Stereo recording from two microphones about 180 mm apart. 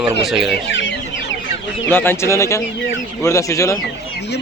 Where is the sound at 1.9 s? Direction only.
10° left (ahead or behind).